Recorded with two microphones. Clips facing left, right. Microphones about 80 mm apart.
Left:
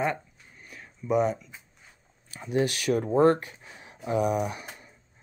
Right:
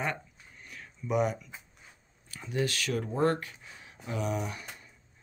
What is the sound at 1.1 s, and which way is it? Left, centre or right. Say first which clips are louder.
Speech: left 4 dB; centre.